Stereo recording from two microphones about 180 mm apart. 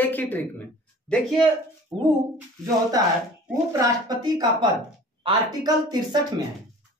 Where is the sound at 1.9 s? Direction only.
5° right (ahead or behind).